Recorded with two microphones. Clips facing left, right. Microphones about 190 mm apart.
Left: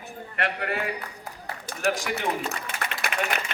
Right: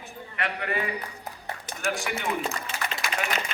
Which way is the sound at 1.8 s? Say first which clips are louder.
Left 4 dB; 40° left (ahead or behind).